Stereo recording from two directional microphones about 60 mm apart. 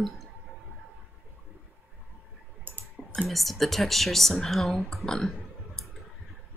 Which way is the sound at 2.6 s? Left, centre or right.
Right.